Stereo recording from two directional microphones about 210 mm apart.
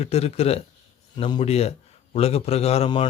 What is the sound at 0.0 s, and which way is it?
Speech, 30° left (ahead or behind).